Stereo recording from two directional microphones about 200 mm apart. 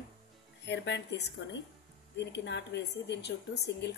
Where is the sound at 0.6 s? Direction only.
60° left (ahead or behind).